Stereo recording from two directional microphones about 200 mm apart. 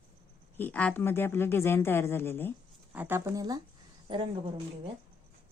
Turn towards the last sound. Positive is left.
turn(degrees=-25)  # may be behind; listen again after turning